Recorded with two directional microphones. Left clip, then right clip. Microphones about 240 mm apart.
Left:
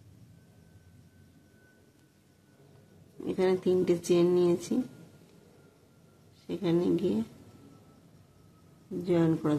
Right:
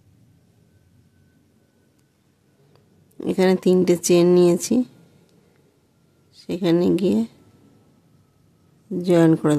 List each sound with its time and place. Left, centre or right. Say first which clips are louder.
3.2 s speech: right 9 dB; right
6.3 s a woman's voice: right 9 dB; right
9.0 s speech: right 11 dB; right